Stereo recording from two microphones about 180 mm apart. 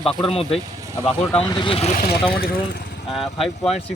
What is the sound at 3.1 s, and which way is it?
Speech, centre (ahead or behind).